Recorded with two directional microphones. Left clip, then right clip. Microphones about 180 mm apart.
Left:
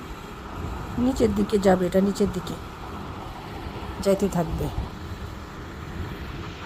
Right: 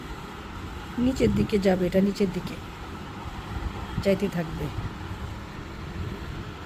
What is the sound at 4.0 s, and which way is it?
Speech, 10° left (ahead or behind).